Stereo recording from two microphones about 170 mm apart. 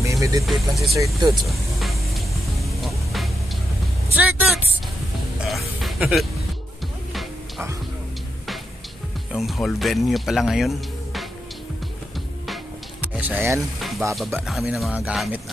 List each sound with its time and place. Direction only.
0.0 s vehicle: 20° right (ahead or behind)
0.5 s speech: centre (ahead or behind)
0.9 s speech: 20° right (ahead or behind)
1.4 s music: centre (ahead or behind)
4.1 s speech: 10° right (ahead or behind)
9.3 s speech: centre (ahead or behind)
13.0 s speech: 10° right (ahead or behind)
13.7 s speech: centre (ahead or behind)